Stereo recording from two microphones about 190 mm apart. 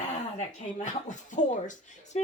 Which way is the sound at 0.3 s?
40° left (ahead or behind).